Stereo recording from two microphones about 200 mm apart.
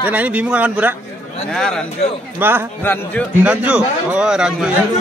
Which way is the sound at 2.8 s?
10° left (ahead or behind).